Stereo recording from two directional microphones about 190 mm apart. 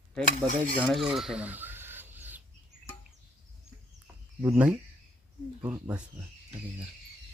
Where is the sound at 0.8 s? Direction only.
Centre (ahead or behind).